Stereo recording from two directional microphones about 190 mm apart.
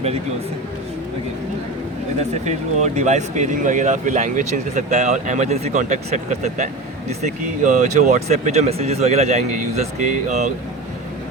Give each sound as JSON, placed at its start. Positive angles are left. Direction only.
{"t": 2.4, "sound": "speech", "side_deg": -35}